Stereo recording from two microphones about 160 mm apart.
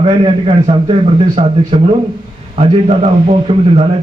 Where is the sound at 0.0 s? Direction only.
35° right (ahead or behind).